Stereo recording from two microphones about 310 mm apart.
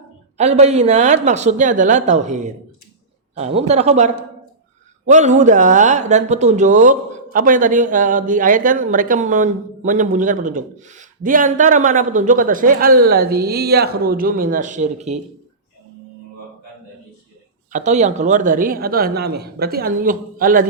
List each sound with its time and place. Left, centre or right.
0.3 s speech: right
17.7 s speech: right